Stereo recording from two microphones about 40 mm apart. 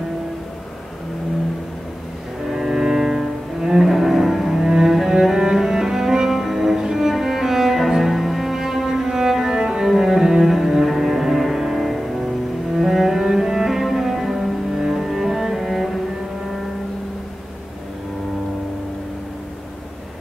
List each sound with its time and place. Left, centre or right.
2.5 s cello: centre